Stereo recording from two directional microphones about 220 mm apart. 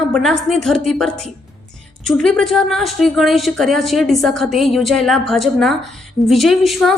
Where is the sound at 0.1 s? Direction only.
Centre (ahead or behind).